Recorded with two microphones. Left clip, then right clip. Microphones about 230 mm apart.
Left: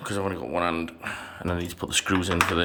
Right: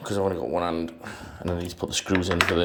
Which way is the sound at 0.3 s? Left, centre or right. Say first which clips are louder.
Even; centre.